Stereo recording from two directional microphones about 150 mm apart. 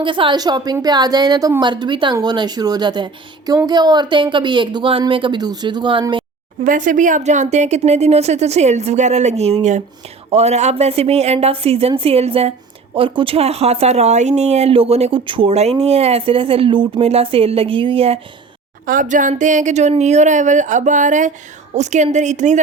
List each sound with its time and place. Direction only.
0.0 s a woman's voice: 35° right (ahead or behind)
6.7 s a woman's voice: 60° right (ahead or behind); by 18.2 s 40° right (ahead or behind)
18.9 s a woman's voice: 60° right (ahead or behind)